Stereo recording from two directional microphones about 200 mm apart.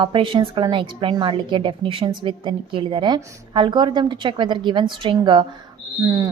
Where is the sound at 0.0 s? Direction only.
25° right (ahead or behind).